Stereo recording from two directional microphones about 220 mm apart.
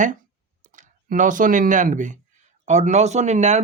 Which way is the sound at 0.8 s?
35° right (ahead or behind).